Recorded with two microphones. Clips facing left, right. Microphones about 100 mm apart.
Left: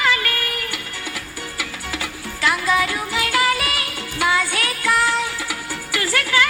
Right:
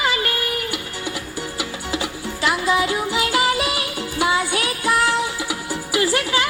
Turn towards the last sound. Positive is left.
turn(degrees=-20)  # may be behind; listen again after turning